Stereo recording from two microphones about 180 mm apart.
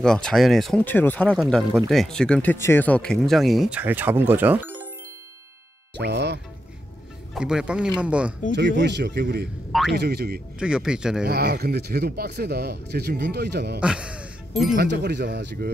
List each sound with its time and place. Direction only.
0.0 s speech: 5° left (ahead or behind)
1.3 s speech: centre (ahead or behind)
5.9 s speech: 70° right (ahead or behind)
7.3 s speech: 5° right (ahead or behind)
8.5 s speech: 75° right (ahead or behind)
9.7 s speech: centre (ahead or behind)
9.9 s speech: 65° right (ahead or behind)
10.6 s speech: 5° right (ahead or behind)
11.2 s speech: 60° right (ahead or behind)
13.7 s speech: 5° right (ahead or behind)
14.8 s speech: 65° right (ahead or behind)